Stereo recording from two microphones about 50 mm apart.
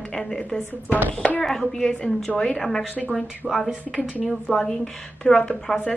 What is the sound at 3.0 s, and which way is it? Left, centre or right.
Speech, centre.